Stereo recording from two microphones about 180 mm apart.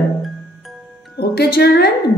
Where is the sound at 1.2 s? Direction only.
60° left (ahead or behind).